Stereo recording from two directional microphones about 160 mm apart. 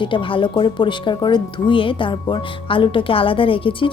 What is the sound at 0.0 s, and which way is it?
Speech, 30° left (ahead or behind).